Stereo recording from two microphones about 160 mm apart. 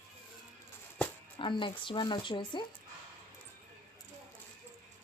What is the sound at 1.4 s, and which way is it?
Speech, 30° left (ahead or behind).